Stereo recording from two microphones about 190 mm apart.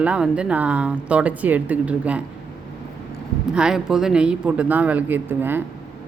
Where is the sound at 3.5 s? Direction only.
5° right (ahead or behind).